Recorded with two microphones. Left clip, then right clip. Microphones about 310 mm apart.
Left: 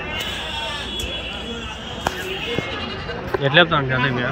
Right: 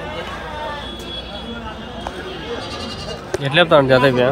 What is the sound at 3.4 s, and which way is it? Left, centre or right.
Speech, centre.